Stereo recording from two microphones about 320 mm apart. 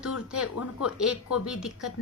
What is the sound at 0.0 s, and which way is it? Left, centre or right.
Speech, centre.